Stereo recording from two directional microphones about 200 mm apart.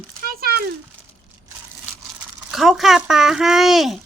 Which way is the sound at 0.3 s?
50° right (ahead or behind).